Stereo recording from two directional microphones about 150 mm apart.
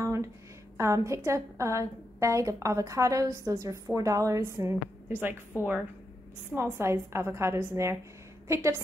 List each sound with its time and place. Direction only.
0.0 s a sound: 20° right (ahead or behind)
0.7 s a woman's voice: 20° right (ahead or behind)
6.5 s a woman's voice: 15° right (ahead or behind)